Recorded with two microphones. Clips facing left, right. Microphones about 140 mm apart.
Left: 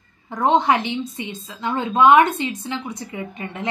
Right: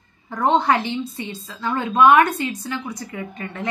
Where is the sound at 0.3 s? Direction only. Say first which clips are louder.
Left 1 dB; 20° left (ahead or behind).